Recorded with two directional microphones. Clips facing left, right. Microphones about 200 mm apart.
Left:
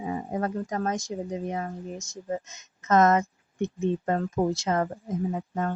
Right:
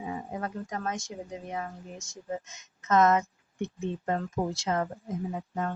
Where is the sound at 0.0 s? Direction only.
45° left (ahead or behind).